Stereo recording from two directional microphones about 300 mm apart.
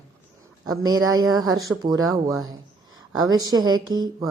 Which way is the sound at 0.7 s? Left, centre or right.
Centre.